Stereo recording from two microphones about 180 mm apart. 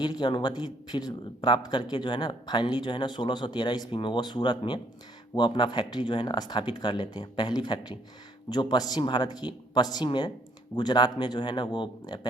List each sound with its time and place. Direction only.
0.0 s speech: 25° left (ahead or behind)